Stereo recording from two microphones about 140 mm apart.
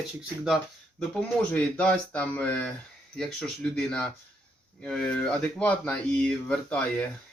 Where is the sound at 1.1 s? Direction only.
10° left (ahead or behind).